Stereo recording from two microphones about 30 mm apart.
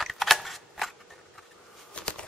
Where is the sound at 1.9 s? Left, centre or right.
Left.